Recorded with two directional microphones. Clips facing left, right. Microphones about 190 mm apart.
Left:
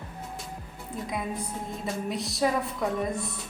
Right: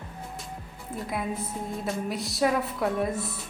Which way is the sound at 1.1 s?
Centre (ahead or behind).